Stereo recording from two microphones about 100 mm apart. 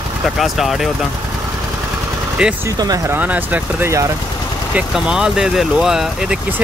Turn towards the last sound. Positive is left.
turn(degrees=-5)  # may be behind; listen again after turning